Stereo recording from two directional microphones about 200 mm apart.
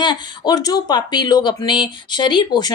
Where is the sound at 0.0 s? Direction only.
20° left (ahead or behind).